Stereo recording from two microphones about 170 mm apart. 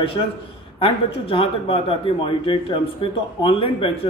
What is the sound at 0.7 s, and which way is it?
Speech, 30° left (ahead or behind).